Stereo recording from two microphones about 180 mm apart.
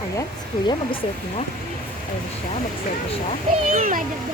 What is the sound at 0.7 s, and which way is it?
Speech, 30° left (ahead or behind).